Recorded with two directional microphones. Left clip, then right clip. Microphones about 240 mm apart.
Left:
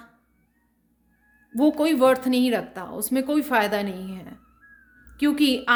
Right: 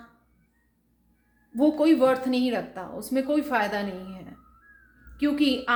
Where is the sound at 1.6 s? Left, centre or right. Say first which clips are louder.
Left 1 dB; left.